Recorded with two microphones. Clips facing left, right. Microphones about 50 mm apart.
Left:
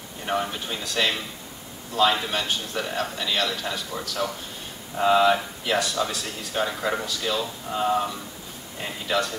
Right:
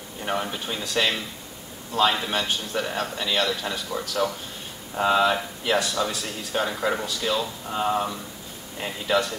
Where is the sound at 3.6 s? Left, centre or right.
Centre.